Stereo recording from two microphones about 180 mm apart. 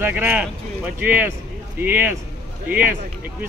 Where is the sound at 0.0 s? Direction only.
10° right (ahead or behind).